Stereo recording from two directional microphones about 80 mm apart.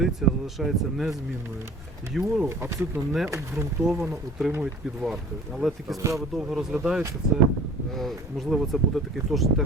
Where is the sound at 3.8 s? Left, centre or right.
Centre.